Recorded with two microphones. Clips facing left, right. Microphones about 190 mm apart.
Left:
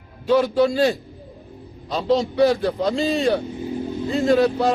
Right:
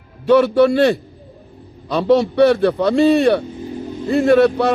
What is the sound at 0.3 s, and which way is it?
Speech, 65° right (ahead or behind).